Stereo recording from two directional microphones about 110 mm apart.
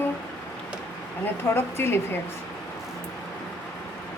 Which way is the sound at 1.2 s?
20° left (ahead or behind).